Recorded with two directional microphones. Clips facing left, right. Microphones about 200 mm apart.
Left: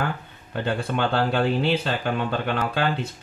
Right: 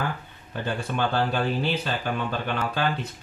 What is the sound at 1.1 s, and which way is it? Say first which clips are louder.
Speech: left 5 dB; 65° left (ahead or behind).